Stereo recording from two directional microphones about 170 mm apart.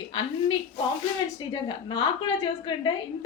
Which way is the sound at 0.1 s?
30° left (ahead or behind).